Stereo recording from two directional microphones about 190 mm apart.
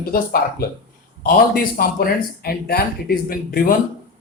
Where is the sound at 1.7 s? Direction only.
50° left (ahead or behind).